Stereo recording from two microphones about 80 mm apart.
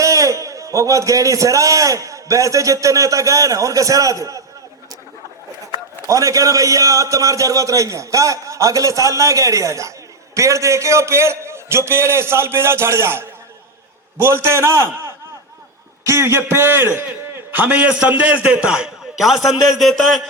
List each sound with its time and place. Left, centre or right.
0.0 s a man's voice: right
6.1 s a man's voice: right; by 20.2 s centre